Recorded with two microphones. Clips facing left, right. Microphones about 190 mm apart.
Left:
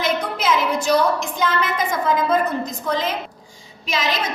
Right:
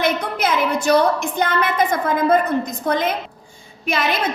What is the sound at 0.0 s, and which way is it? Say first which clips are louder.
A woman's voice: right 2 dB; 60° right (ahead or behind).